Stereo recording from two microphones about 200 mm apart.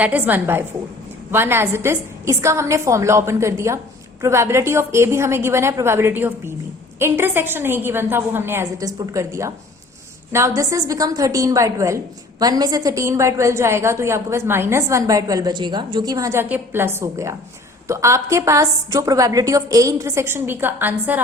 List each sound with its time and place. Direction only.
0.0 s a woman's voice: 10° right (ahead or behind)